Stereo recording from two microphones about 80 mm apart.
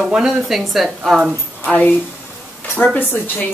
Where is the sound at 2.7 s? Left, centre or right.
Left.